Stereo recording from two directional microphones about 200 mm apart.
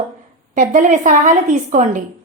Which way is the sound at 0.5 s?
40° right (ahead or behind).